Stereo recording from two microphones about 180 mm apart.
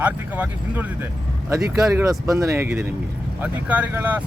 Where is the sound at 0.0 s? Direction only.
10° right (ahead or behind).